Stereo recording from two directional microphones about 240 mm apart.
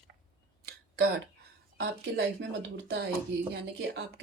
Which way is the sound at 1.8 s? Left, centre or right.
Right.